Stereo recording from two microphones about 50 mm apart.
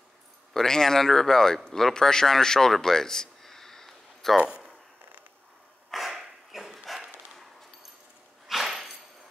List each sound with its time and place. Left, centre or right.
0.5 s speech: centre
4.4 s speech: right
5.9 s dog: centre
8.5 s a sound: centre